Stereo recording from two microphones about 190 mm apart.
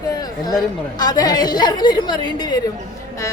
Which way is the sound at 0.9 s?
20° left (ahead or behind).